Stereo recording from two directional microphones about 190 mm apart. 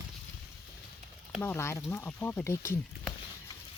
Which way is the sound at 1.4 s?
10° left (ahead or behind).